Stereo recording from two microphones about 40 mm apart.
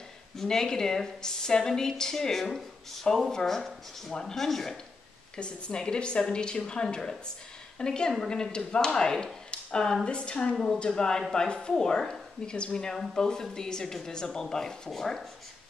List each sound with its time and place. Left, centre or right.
0.4 s a woman's voice: centre
5.3 s a woman's voice: left
10.5 s a woman's voice: centre
10.8 s a woman's voice: left